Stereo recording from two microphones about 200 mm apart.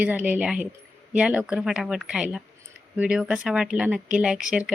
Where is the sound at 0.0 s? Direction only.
5° right (ahead or behind).